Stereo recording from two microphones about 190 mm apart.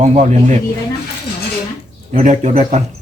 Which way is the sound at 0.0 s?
35° right (ahead or behind).